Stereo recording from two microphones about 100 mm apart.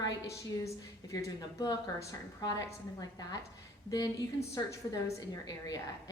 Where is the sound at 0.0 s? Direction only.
35° left (ahead or behind).